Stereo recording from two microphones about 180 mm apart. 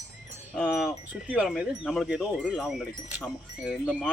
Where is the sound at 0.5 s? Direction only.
5° left (ahead or behind).